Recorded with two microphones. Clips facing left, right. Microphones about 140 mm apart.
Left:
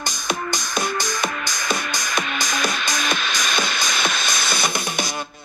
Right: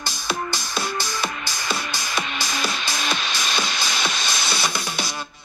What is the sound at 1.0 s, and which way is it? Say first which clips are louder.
Music: left 3 dB; 45° left (ahead or behind).